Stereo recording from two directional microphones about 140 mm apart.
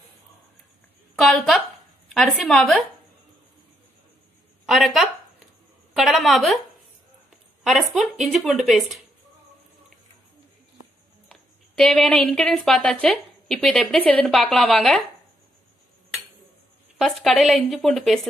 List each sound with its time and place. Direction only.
1.1 s a woman's voice: centre (ahead or behind)
4.6 s a woman's voice: centre (ahead or behind)
7.6 s a woman's voice: centre (ahead or behind)
11.2 s speech: 5° left (ahead or behind)
17.0 s a woman's voice: centre (ahead or behind)